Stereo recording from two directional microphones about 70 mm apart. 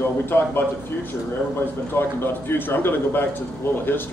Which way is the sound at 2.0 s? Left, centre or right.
Left.